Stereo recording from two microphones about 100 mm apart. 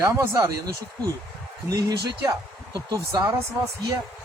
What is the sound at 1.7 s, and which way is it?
Speech, 40° right (ahead or behind).